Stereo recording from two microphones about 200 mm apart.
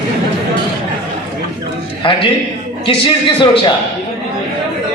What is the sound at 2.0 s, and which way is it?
A man's voice, 25° left (ahead or behind).